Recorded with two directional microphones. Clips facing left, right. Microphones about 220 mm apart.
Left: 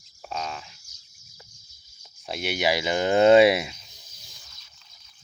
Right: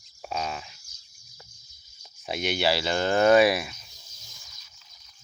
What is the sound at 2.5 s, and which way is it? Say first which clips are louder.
Speech: left 1 dB; 15° left (ahead or behind).